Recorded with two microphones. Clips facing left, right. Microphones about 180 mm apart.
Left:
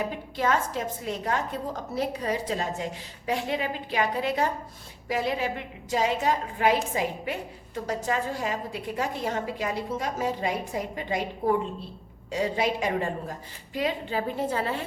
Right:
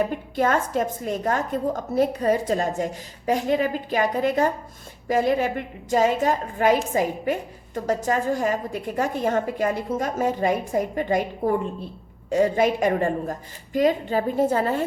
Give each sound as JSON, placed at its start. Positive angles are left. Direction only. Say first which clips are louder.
{"t": 0.1, "sound": "a woman's voice", "louder": "right 4 dB", "side_deg": -50}